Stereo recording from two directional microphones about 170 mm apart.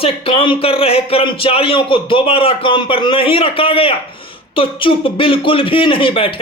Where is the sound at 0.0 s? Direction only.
30° left (ahead or behind).